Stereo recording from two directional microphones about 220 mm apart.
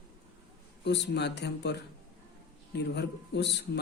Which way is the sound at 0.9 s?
50° left (ahead or behind).